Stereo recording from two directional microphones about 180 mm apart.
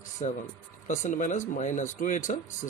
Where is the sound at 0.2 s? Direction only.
45° left (ahead or behind).